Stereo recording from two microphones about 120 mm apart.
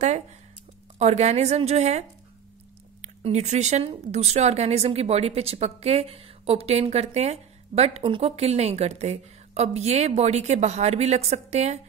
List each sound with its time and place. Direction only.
0.9 s a woman's voice: 70° right (ahead or behind)
3.2 s a woman's voice: 70° right (ahead or behind)
8.0 s a woman's voice: 55° right (ahead or behind)